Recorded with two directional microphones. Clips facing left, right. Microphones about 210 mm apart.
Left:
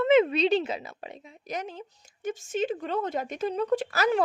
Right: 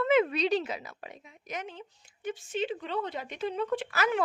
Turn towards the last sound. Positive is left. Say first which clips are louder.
# left 4 dB
turn(degrees=40)  # may be behind; listen again after turning